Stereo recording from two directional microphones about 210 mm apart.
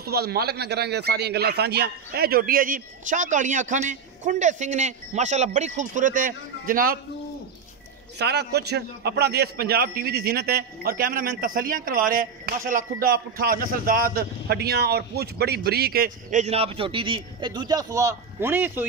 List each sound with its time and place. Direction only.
0.0 s speech: 50° right (ahead or behind)
8.2 s a man's voice: 50° right (ahead or behind); by 18.9 s 10° right (ahead or behind)